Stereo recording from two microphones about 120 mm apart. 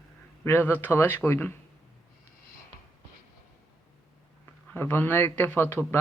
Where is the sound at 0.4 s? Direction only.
20° left (ahead or behind).